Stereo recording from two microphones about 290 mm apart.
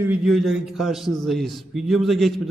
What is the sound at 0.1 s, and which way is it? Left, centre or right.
A man's voice, centre.